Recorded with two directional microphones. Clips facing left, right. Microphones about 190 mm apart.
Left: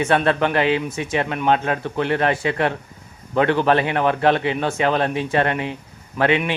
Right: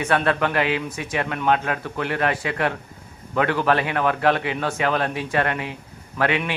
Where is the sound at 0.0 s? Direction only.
25° left (ahead or behind).